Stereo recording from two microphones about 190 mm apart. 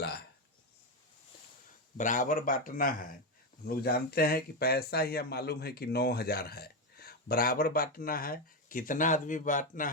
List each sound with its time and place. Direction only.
2.0 s speech: 40° left (ahead or behind)